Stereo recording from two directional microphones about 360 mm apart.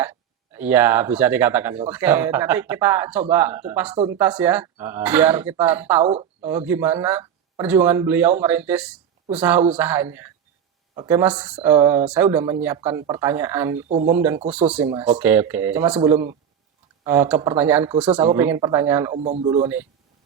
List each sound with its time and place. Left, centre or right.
0.0 s speech: centre
6.0 s speech: centre
6.4 s speech: centre
13.8 s speech: centre
14.1 s speech: centre
19.2 s speech: centre
19.6 s speech: centre